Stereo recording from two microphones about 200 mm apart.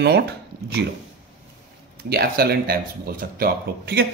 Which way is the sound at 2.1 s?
50° right (ahead or behind).